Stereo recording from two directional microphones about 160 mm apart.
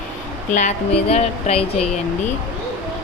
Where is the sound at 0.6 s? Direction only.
45° left (ahead or behind).